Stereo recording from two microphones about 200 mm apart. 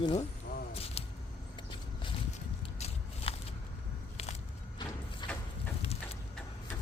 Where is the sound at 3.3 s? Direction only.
30° left (ahead or behind).